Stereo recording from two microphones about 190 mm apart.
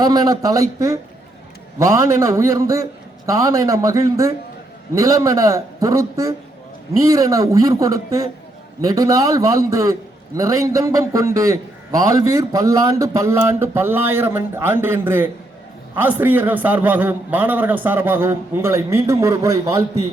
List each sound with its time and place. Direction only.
0.0 s a man's voice: 20° right (ahead or behind)